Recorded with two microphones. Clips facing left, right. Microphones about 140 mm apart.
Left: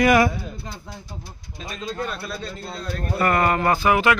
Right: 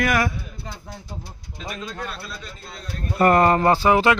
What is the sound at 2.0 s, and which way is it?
Speech, 35° left (ahead or behind).